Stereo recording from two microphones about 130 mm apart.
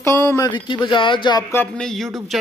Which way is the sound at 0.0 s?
20° left (ahead or behind).